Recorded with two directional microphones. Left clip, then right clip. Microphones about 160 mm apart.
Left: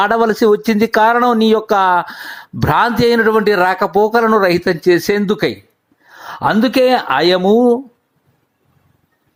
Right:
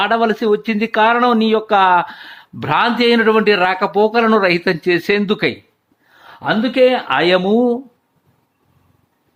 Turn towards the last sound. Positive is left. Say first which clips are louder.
# left 4 dB
turn(degrees=0)  # may be behind; listen again after turning